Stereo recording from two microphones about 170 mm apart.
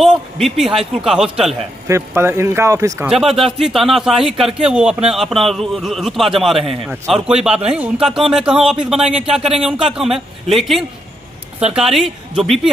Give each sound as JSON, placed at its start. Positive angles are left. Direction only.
{"t": 0.0, "sound": "a man's voice", "side_deg": 0}
{"t": 1.9, "sound": "a man's voice", "side_deg": -15}
{"t": 3.1, "sound": "a man's voice", "side_deg": 0}